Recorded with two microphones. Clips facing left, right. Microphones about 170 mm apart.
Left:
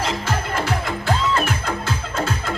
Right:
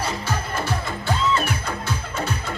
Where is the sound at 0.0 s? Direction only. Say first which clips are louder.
Left 3 dB; 90° left.